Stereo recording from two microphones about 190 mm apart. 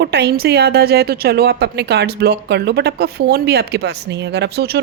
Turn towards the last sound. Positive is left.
turn(degrees=-60)  # may be behind; listen again after turning